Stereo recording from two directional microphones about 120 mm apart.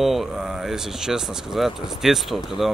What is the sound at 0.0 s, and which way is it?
Speech, centre (ahead or behind).